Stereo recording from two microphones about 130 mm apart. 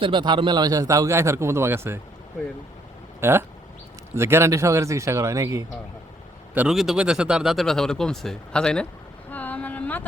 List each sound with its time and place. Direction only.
0.0 s a man's voice: 35° right (ahead or behind); by 2.0 s 20° right (ahead or behind)
3.2 s a man's voice: 20° right (ahead or behind)
6.5 s speech: 10° right (ahead or behind); by 8.9 s 5° left (ahead or behind)
9.3 s a sound: 15° left (ahead or behind)